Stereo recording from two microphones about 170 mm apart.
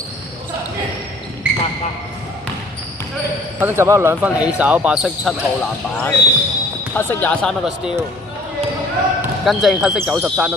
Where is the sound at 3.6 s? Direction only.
15° right (ahead or behind).